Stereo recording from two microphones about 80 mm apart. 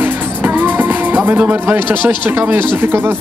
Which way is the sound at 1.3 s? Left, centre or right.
Right.